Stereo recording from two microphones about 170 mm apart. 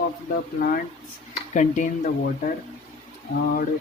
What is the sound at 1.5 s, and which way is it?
Speech, 45° left (ahead or behind).